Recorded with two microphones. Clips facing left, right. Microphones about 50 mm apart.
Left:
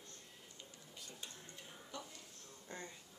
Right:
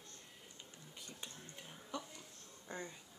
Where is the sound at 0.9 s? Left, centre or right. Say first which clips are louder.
Right 1 dB; right.